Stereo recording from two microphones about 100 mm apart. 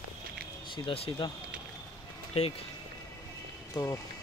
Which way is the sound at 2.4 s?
90° left.